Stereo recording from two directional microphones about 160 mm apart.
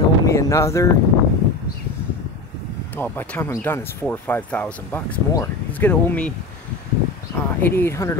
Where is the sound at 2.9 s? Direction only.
10° left (ahead or behind).